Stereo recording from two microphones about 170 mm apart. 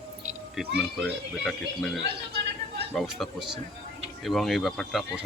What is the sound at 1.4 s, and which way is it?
Speech, centre (ahead or behind).